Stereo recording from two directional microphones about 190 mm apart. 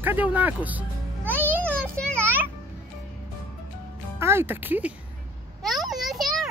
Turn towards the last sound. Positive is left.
turn(degrees=0)  # may be behind; listen again after turning